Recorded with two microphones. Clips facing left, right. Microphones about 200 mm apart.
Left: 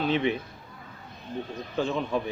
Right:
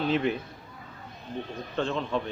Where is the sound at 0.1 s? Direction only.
Centre (ahead or behind).